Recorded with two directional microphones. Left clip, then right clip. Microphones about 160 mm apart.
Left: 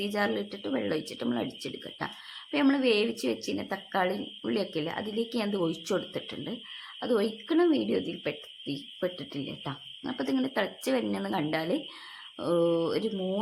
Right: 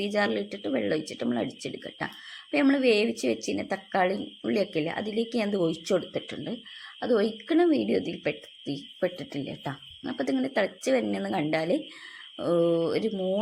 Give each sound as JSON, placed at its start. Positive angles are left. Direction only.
{"t": 0.0, "sound": "a woman's voice", "side_deg": -5}